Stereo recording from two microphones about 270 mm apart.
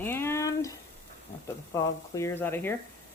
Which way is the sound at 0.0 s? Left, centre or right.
Centre.